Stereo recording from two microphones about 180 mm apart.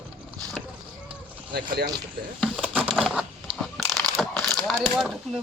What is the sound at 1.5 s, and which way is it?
Speech, 60° right (ahead or behind).